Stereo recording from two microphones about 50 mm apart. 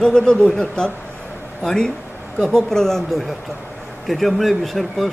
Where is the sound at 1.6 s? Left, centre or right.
Centre.